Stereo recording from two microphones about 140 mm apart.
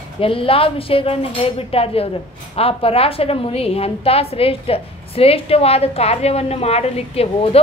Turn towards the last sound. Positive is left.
turn(degrees=45)  # may be behind; listen again after turning